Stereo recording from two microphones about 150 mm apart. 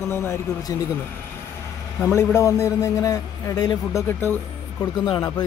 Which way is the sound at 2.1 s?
20° left (ahead or behind).